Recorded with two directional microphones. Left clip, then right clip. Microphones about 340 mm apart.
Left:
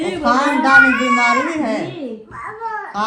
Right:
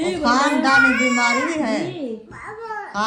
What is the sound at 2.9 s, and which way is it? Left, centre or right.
Speech, centre.